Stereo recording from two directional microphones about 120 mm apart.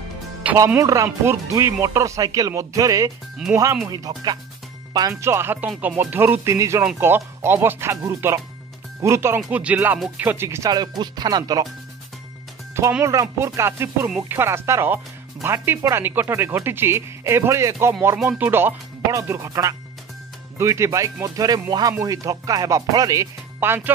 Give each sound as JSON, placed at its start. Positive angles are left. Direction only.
{"t": 0.7, "sound": "speech", "side_deg": -25}
{"t": 3.5, "sound": "speech", "side_deg": -10}
{"t": 3.9, "sound": "speech", "side_deg": -35}
{"t": 5.2, "sound": "speech", "side_deg": -20}
{"t": 9.5, "sound": "speech", "side_deg": -10}
{"t": 13.0, "sound": "speech", "side_deg": -25}
{"t": 23.6, "sound": "speech", "side_deg": -20}